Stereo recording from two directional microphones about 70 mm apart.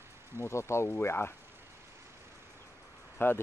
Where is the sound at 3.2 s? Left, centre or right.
Left.